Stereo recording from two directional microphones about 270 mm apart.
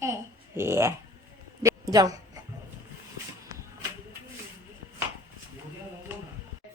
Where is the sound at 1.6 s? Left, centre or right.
Centre.